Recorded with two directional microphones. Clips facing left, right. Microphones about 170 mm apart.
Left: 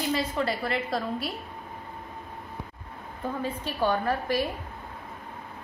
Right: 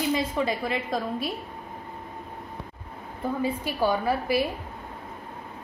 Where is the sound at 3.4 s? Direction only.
10° right (ahead or behind).